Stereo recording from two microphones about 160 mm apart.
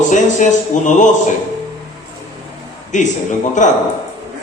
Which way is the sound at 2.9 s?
50° left (ahead or behind).